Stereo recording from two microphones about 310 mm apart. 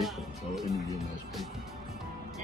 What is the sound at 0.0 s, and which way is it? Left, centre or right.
Music, centre.